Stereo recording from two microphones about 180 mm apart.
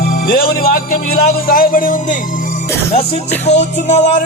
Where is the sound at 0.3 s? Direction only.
55° left (ahead or behind).